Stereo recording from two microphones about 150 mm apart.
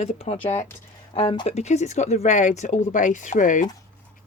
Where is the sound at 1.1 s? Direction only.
35° left (ahead or behind).